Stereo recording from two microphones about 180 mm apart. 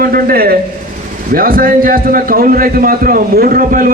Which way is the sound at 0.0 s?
55° right (ahead or behind).